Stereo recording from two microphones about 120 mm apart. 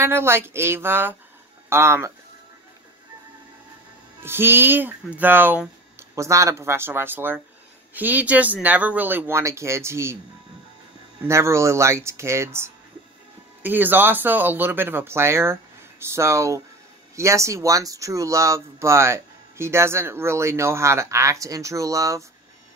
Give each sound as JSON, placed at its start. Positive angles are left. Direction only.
{"t": 0.0, "sound": "speech", "side_deg": -20}
{"t": 4.2, "sound": "speech", "side_deg": -20}
{"t": 6.1, "sound": "speech", "side_deg": -25}
{"t": 11.2, "sound": "speech", "side_deg": -25}